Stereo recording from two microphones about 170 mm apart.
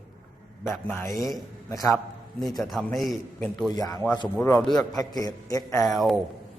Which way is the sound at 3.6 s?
20° left (ahead or behind).